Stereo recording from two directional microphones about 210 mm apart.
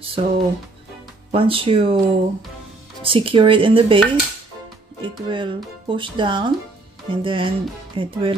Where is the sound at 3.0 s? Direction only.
25° right (ahead or behind).